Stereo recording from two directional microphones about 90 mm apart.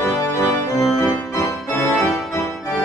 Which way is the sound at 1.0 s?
30° left (ahead or behind).